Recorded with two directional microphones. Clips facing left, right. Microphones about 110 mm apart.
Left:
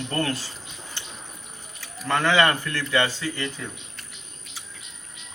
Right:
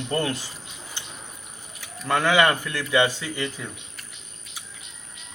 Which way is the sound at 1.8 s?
15° right (ahead or behind).